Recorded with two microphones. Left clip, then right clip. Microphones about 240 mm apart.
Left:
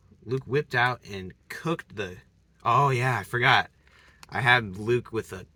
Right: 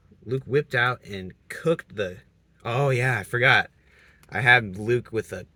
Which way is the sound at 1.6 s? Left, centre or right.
Left.